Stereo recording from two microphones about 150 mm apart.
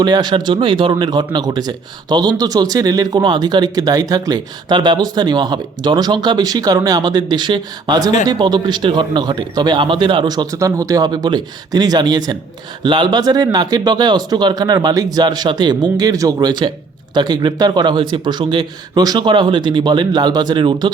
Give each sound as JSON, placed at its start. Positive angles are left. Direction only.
{"t": 0.0, "sound": "a man's voice", "side_deg": -30}